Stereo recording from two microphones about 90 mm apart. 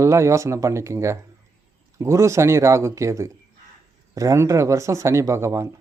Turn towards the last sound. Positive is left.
turn(degrees=-35)  # may be behind; listen again after turning